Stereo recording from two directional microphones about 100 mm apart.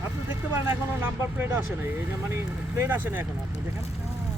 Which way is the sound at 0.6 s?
25° right (ahead or behind).